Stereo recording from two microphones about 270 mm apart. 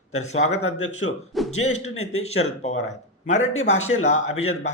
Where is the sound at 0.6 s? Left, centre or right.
Left.